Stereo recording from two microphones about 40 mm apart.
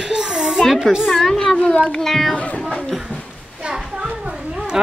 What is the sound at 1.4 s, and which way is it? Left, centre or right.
Speech, left.